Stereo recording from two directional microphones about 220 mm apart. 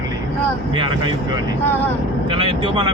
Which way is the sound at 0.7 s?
20° right (ahead or behind).